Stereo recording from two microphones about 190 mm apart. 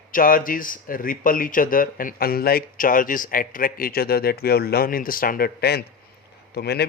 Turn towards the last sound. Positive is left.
turn(degrees=60)  # may be behind; listen again after turning